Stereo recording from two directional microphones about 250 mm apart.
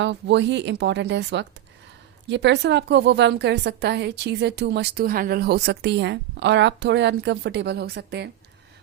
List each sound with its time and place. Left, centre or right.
0.0 s a woman's voice: right